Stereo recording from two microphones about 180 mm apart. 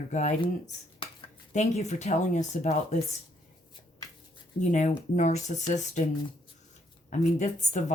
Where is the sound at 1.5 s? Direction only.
40° left (ahead or behind).